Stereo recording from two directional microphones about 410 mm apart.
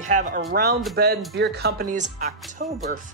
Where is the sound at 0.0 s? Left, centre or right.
Centre.